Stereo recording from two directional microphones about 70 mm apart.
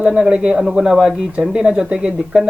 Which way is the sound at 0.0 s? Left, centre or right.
Centre.